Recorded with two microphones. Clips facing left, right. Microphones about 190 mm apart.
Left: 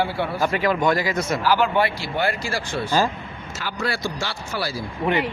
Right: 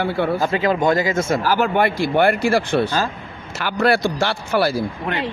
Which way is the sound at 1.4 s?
45° right (ahead or behind).